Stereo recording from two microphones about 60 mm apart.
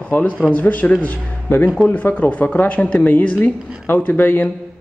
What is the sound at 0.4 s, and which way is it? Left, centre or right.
A man's voice, left.